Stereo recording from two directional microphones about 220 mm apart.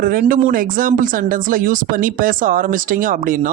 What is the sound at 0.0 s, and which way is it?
Speech, 40° right (ahead or behind).